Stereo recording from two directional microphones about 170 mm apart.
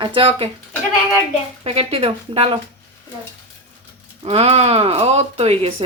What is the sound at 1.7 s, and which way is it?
Speech, 35° right (ahead or behind).